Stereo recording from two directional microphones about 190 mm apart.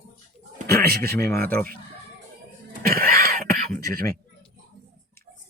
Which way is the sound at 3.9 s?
50° right (ahead or behind).